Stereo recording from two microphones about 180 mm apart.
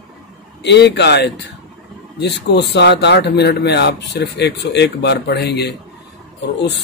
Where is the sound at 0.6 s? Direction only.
75° left (ahead or behind).